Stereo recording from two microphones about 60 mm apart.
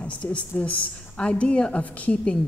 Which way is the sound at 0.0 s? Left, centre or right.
Left.